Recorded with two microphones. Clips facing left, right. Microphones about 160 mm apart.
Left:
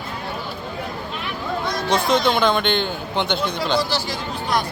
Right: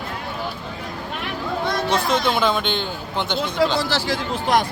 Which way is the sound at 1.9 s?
5° right (ahead or behind).